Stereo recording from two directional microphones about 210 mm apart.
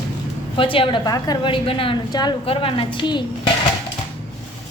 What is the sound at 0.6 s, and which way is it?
A woman's voice, 25° left (ahead or behind).